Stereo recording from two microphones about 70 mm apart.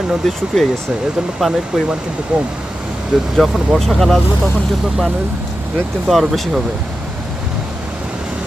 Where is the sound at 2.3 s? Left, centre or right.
Centre.